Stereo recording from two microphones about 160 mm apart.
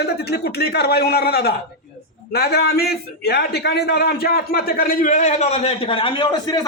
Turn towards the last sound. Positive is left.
turn(degrees=30)  # may be behind; listen again after turning